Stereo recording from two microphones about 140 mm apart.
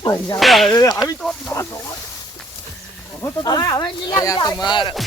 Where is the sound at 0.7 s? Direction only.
25° left (ahead or behind).